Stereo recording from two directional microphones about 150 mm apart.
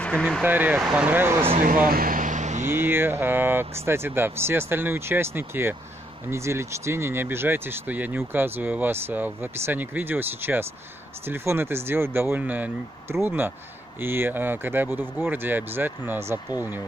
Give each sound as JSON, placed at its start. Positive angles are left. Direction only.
{"t": 0.0, "sound": "speech", "side_deg": 5}
{"t": 0.4, "sound": "speech", "side_deg": -10}
{"t": 1.6, "sound": "vehicle", "side_deg": -70}
{"t": 2.7, "sound": "speech", "side_deg": -15}